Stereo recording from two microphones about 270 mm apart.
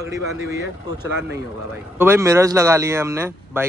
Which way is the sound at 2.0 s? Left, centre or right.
Centre.